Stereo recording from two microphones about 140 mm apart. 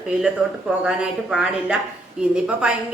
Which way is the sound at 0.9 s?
5° right (ahead or behind).